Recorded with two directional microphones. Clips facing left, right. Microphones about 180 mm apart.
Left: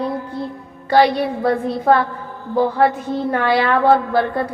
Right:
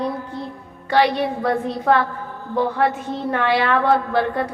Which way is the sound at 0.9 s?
35° left (ahead or behind).